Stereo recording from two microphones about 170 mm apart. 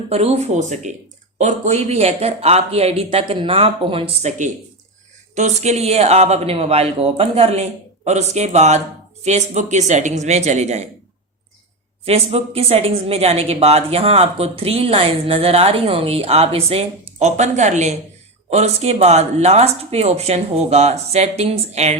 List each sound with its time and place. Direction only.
0.1 s a woman's voice: 40° right (ahead or behind)
12.0 s a woman's voice: 35° right (ahead or behind)